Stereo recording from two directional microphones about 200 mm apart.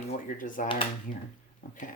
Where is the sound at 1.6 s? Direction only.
40° left (ahead or behind).